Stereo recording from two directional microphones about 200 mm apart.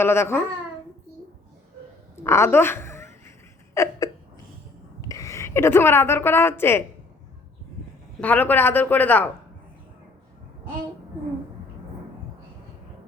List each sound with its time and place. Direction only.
0.0 s speech: 10° left (ahead or behind)
2.1 s a sound: 15° left (ahead or behind)
3.8 s speech: 15° left (ahead or behind)
4.9 s a woman's voice: 15° left (ahead or behind)
8.2 s speech: 10° left (ahead or behind)